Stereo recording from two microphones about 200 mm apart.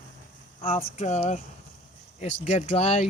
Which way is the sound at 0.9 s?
35° left (ahead or behind).